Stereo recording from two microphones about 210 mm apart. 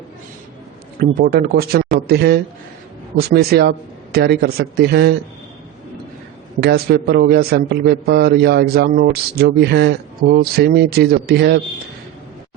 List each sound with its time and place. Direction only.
0.9 s a man's voice: 45° right (ahead or behind)
6.6 s a man's voice: 50° right (ahead or behind)